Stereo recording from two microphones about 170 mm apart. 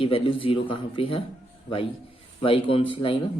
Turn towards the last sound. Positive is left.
turn(degrees=30)  # may be behind; listen again after turning